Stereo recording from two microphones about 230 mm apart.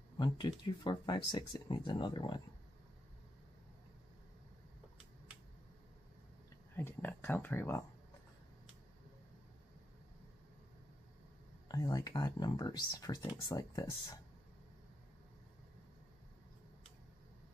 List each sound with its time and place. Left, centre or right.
0.2 s speech: centre
6.8 s speech: centre
11.7 s speech: centre